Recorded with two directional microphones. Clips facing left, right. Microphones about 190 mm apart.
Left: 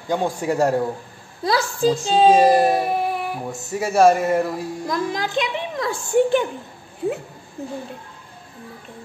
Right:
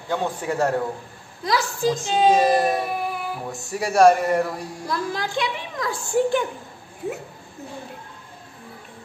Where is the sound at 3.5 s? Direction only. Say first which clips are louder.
Left 1 dB; centre (ahead or behind).